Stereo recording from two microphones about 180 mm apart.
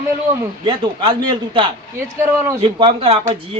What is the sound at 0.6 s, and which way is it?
A man's voice, 25° right (ahead or behind).